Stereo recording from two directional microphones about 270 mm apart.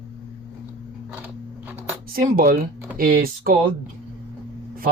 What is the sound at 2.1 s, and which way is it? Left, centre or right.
Speech, right.